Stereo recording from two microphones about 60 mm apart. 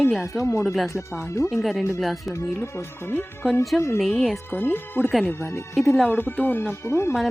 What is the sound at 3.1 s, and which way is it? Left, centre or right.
Speech, left.